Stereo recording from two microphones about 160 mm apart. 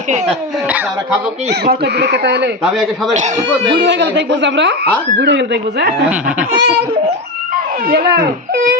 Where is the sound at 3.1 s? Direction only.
50° right (ahead or behind).